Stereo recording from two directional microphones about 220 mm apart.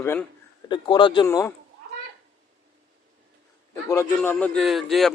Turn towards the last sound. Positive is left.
turn(degrees=0)  # may be behind; listen again after turning